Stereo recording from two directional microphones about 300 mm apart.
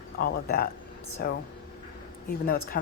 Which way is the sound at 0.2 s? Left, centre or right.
Left.